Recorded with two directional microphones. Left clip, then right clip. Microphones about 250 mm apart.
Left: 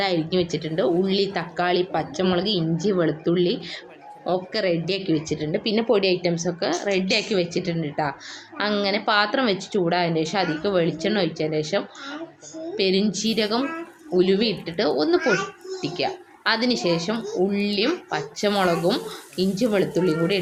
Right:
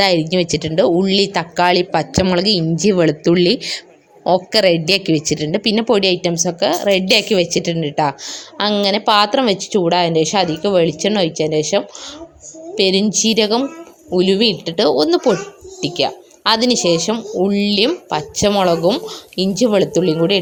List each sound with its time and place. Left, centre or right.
0.0 s a woman's voice: right